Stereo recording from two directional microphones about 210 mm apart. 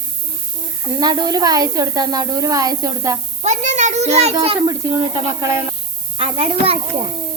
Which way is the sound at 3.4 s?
35° right (ahead or behind).